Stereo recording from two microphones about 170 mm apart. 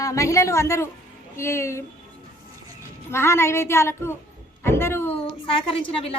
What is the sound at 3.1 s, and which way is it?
A woman's voice, 15° left (ahead or behind).